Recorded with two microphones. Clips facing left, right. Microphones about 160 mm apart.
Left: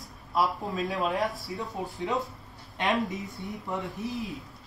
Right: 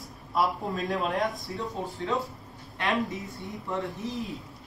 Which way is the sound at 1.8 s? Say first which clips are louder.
Even; 15° left (ahead or behind).